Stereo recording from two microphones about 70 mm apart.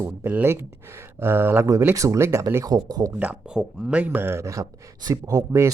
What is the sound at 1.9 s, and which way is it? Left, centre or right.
Speech, right.